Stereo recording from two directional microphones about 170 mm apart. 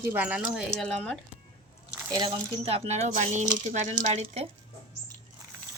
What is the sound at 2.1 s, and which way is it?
Speech, 25° right (ahead or behind).